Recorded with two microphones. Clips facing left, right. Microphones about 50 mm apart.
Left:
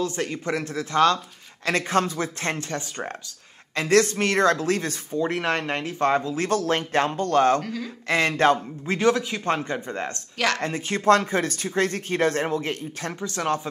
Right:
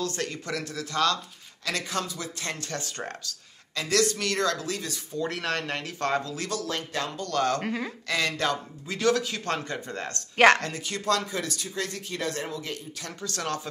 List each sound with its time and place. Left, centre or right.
0.0 s speech: left
2.7 s speech: left
3.7 s speech: left
5.1 s speech: left
7.6 s speech: right
8.1 s speech: left
9.1 s speech: left
10.3 s speech: right
10.6 s speech: left
13.2 s speech: left